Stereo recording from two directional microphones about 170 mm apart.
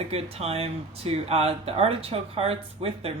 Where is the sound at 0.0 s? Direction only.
35° right (ahead or behind).